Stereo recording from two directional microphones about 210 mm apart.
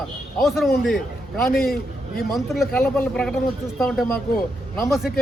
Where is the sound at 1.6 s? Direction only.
45° left (ahead or behind).